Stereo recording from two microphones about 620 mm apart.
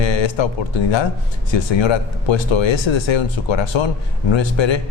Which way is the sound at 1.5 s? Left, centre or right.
Left.